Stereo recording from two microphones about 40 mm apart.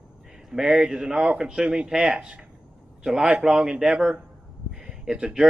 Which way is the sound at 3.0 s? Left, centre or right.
Centre.